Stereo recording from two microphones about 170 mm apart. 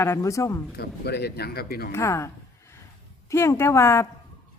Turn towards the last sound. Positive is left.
turn(degrees=15)  # may be behind; listen again after turning